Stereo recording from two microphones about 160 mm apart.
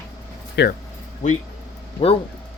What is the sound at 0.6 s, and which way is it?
Speech, 90° left.